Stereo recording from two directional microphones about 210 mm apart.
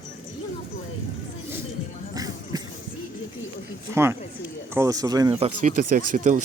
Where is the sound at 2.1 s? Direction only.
20° right (ahead or behind).